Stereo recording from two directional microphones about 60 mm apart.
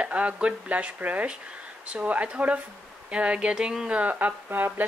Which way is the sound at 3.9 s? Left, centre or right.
Right.